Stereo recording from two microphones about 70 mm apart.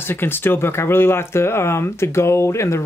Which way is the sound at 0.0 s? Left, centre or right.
Left.